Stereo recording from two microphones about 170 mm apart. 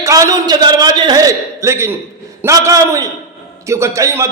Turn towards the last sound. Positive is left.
turn(degrees=-15)  # may be behind; listen again after turning